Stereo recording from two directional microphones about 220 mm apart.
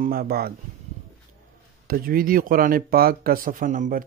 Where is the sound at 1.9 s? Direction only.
40° right (ahead or behind).